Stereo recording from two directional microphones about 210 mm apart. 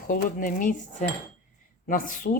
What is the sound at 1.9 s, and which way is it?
Speech, 40° left (ahead or behind).